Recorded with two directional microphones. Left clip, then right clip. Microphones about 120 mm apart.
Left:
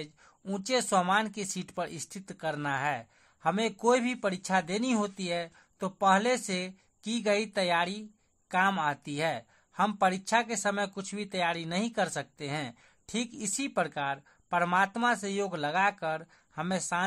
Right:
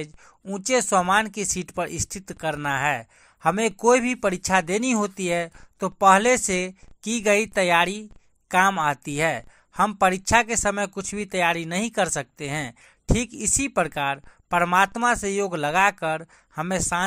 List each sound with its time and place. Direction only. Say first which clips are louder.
0.6 s speech: right 7 dB; 35° right (ahead or behind)